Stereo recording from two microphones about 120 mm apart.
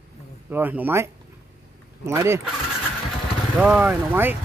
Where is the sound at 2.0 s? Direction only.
25° right (ahead or behind).